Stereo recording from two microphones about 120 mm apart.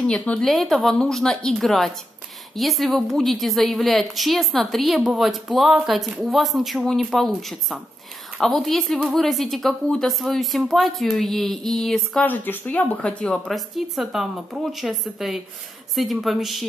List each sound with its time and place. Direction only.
0.0 s a woman's voice: 10° left (ahead or behind)
12.3 s a woman's voice: 15° left (ahead or behind)